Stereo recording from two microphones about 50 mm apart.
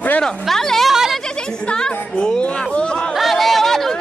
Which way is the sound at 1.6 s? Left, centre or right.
Centre.